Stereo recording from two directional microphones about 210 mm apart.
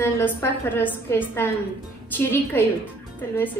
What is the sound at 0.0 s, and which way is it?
A woman's voice, 10° left (ahead or behind).